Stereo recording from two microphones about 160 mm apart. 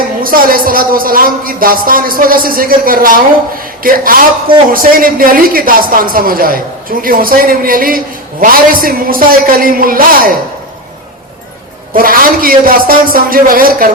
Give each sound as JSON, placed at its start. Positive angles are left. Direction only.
{"t": 0.2, "sound": "a man's voice", "side_deg": -65}
{"t": 11.9, "sound": "a man's voice", "side_deg": -60}